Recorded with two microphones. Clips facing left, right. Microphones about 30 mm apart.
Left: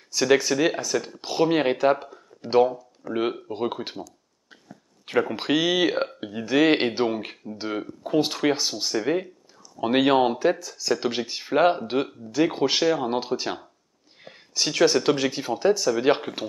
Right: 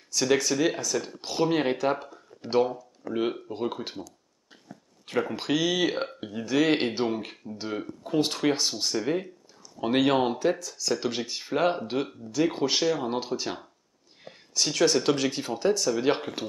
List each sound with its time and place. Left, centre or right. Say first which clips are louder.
0.1 s speech: left 4 dB; centre
5.3 s speech: left 3 dB; centre